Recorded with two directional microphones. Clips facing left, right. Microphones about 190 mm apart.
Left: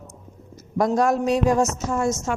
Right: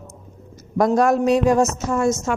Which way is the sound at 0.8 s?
65° right (ahead or behind).